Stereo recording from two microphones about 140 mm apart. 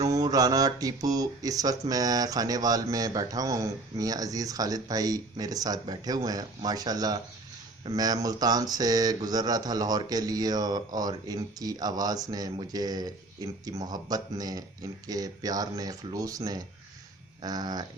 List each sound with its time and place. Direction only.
0.0 s speech: 25° right (ahead or behind)